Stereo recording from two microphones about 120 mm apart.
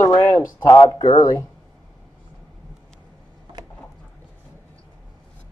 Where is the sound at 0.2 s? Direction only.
25° left (ahead or behind).